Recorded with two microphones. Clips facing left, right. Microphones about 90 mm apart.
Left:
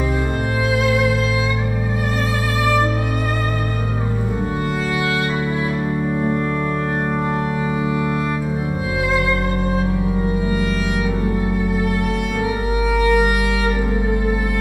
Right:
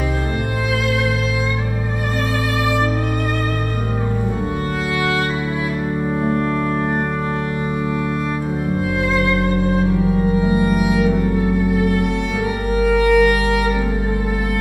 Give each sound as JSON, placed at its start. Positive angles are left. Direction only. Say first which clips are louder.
{"t": 10.5, "sound": "music", "louder": "right 4 dB", "side_deg": -15}
{"t": 12.8, "sound": "music", "louder": "right 4 dB", "side_deg": 5}